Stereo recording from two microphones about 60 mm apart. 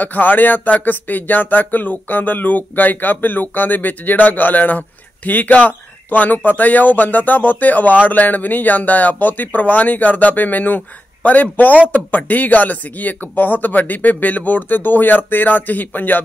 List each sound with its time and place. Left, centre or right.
0.0 s speech: left